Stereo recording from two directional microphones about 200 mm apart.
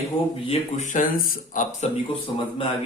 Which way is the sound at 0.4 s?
35° left (ahead or behind).